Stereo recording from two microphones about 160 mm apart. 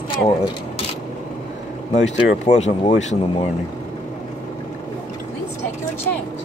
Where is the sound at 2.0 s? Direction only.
45° left (ahead or behind).